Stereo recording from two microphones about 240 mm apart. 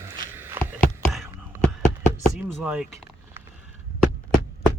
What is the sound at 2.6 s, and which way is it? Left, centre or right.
Speech, centre.